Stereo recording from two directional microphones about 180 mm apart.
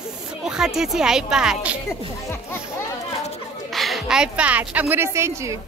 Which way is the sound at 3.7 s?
Centre (ahead or behind).